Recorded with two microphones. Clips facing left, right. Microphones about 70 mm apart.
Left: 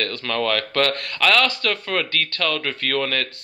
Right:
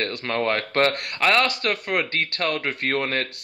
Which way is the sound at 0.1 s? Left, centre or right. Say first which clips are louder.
Left 1 dB; right.